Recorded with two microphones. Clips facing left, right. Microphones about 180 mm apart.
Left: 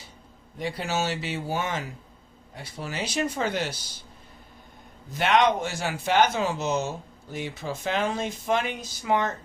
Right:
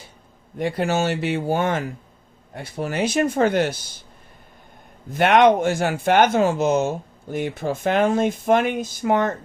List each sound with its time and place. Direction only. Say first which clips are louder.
0.6 s speech: right 7 dB; 55° right (ahead or behind)
5.1 s speech: right 7 dB; 55° right (ahead or behind)